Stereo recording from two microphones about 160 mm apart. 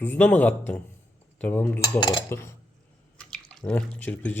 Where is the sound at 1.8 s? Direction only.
25° left (ahead or behind).